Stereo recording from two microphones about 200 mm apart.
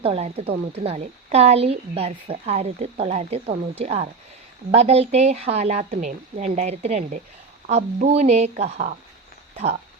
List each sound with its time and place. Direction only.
0.0 s a woman's voice: 30° right (ahead or behind)